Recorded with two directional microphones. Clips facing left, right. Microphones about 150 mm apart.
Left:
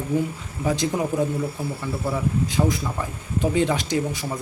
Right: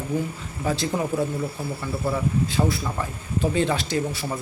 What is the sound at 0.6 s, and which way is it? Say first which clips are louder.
Speech: left 2 dB; 15° left (ahead or behind).